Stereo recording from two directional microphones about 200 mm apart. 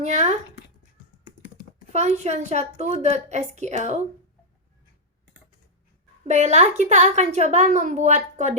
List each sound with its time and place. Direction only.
0.0 s a woman's voice: 35° right (ahead or behind)
1.9 s a woman's voice: 35° right (ahead or behind)
6.2 s a woman's voice: 35° right (ahead or behind)